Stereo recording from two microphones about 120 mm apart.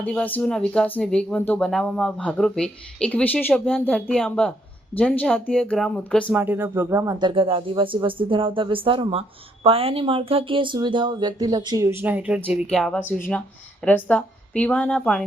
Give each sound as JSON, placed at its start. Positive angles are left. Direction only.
{"t": 0.0, "sound": "speech", "side_deg": 10}
{"t": 6.3, "sound": "speech", "side_deg": -15}
{"t": 7.2, "sound": "speech", "side_deg": -45}
{"t": 11.9, "sound": "speech", "side_deg": -15}
{"t": 12.7, "sound": "speech", "side_deg": 5}